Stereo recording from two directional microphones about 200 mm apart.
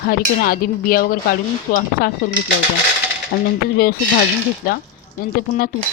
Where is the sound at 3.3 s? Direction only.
45° left (ahead or behind).